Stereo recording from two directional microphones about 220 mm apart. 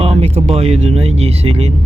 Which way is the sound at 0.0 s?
30° right (ahead or behind).